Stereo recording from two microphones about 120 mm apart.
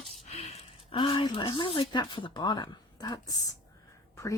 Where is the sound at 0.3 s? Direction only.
65° left (ahead or behind).